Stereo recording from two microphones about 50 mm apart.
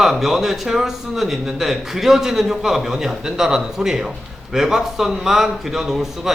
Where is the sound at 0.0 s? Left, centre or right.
Centre.